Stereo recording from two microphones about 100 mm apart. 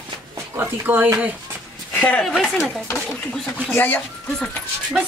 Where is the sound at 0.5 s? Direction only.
20° right (ahead or behind).